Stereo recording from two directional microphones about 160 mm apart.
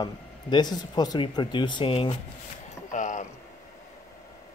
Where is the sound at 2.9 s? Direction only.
50° left (ahead or behind).